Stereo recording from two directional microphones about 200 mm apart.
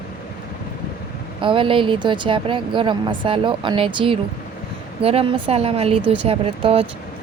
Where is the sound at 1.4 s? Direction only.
25° right (ahead or behind).